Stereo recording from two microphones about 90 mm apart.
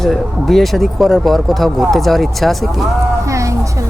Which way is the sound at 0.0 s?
5° left (ahead or behind).